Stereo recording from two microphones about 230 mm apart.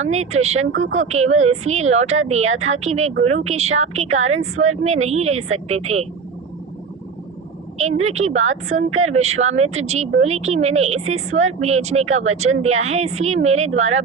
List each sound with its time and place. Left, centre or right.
0.0 s speech: right
8.0 s speech: right